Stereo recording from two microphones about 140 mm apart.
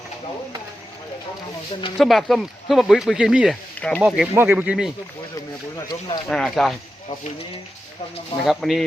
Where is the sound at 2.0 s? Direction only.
Centre (ahead or behind).